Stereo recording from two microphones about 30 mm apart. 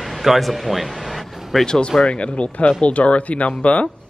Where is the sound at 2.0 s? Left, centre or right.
Left.